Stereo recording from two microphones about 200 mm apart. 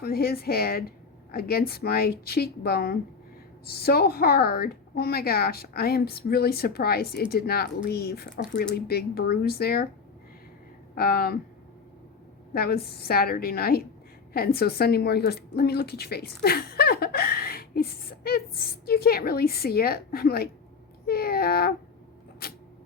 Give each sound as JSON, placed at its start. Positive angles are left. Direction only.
{"t": 0.0, "sound": "a woman's voice", "side_deg": 50}
{"t": 10.9, "sound": "a woman's voice", "side_deg": 50}
{"t": 12.5, "sound": "a woman's voice", "side_deg": 50}
{"t": 22.4, "sound": "a sound", "side_deg": 50}